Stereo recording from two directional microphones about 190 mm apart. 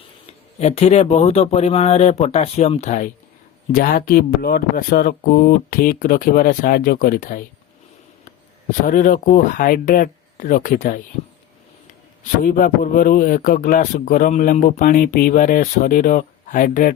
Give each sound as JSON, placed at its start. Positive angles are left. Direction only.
{"t": 0.3, "sound": "a man's voice", "side_deg": 35}
{"t": 8.9, "sound": "a man's voice", "side_deg": 45}
{"t": 12.4, "sound": "a man's voice", "side_deg": 45}